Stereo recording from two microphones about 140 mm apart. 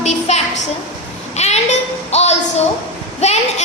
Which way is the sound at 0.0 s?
50° left (ahead or behind).